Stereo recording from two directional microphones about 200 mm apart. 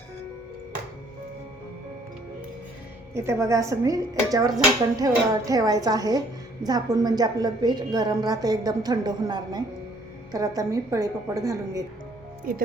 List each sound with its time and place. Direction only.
3.2 s a woman's voice: 15° right (ahead or behind)
12.5 s speech: 45° right (ahead or behind)